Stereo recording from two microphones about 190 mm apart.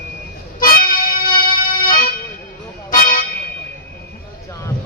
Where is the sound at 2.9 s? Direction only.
50° left (ahead or behind).